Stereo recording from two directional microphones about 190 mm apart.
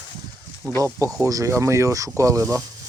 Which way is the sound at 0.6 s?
15° right (ahead or behind).